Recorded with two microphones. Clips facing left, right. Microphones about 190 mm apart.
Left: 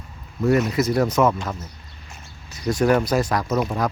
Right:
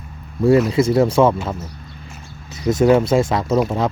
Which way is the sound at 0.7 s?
30° right (ahead or behind).